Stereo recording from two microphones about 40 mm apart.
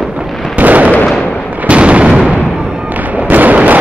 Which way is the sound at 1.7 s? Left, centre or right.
Right.